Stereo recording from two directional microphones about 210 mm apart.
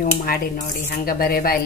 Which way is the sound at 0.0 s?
40° left (ahead or behind).